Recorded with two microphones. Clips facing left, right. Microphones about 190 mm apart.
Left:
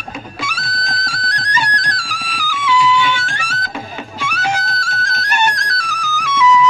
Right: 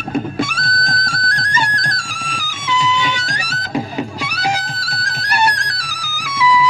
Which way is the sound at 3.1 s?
40° right (ahead or behind).